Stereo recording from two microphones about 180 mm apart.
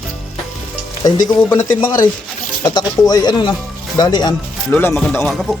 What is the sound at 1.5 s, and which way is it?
Speech, 20° left (ahead or behind).